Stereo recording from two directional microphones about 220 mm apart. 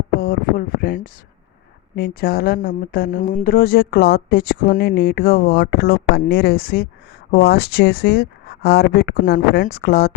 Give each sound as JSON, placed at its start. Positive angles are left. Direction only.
{"t": 0.2, "sound": "speech", "side_deg": 40}